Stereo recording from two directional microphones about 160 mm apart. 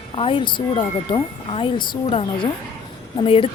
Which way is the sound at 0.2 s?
35° left (ahead or behind).